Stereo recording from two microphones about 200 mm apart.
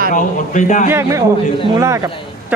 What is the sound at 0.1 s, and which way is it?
Speech, 40° left (ahead or behind).